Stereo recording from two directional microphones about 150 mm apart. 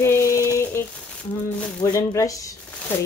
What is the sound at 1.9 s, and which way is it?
Speech, 20° left (ahead or behind).